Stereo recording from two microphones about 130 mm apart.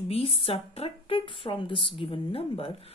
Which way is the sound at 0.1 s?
45° left (ahead or behind).